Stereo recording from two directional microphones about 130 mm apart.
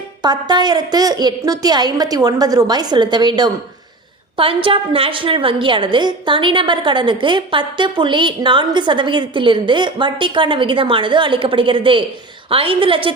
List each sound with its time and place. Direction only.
0.2 s a woman's voice: 35° right (ahead or behind)